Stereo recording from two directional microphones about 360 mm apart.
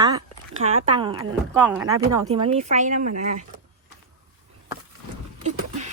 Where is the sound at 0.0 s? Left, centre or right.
Centre.